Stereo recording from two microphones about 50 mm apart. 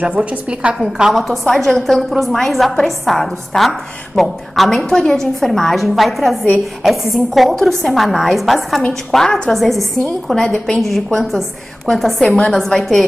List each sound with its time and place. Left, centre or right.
0.0 s a woman's voice: right
0.7 s a woman's voice: centre
1.1 s a woman's voice: centre
9.1 s a woman's voice: centre
10.3 s a woman's voice: centre
11.1 s a woman's voice: centre